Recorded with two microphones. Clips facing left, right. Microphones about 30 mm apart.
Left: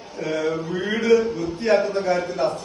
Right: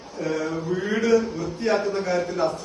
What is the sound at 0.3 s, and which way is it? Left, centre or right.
Mantra, left.